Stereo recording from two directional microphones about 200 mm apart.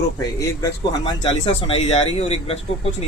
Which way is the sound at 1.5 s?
30° left (ahead or behind).